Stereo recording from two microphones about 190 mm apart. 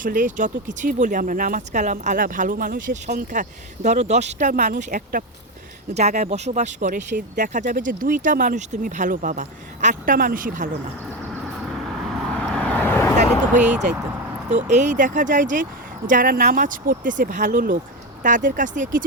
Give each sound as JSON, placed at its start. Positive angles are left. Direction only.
{"t": 0.0, "sound": "speech", "side_deg": -45}
{"t": 11.6, "sound": "vehicle", "side_deg": 0}
{"t": 13.5, "sound": "speech", "side_deg": -40}